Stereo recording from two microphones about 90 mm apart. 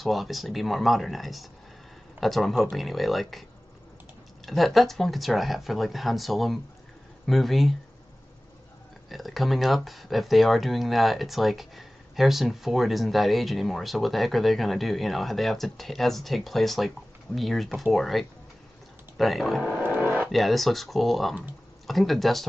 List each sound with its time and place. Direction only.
0.0 s speech: centre (ahead or behind)
4.5 s speech: centre (ahead or behind)
9.1 s speech: centre (ahead or behind)
19.8 s a sound: 20° right (ahead or behind)
20.2 s speech: centre (ahead or behind)